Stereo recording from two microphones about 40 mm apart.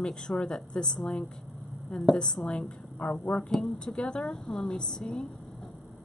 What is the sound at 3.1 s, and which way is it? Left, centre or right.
Speech, left.